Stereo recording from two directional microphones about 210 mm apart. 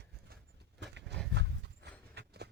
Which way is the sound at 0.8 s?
55° right (ahead or behind).